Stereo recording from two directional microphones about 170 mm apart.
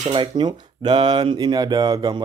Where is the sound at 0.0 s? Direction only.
25° right (ahead or behind).